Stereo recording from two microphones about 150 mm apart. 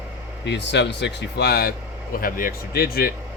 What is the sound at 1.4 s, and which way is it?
Speech, 90° left.